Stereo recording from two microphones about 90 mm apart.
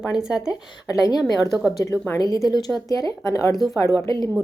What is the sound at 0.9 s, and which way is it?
Speech, 45° left (ahead or behind).